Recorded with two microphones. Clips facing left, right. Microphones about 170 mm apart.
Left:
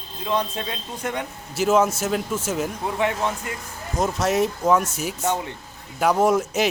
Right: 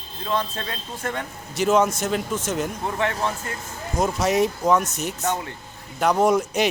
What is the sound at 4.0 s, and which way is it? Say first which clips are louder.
A man's voice: right 1 dB; centre (ahead or behind).